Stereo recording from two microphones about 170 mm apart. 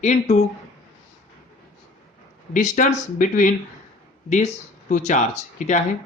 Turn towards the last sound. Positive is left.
turn(degrees=45)  # may be behind; listen again after turning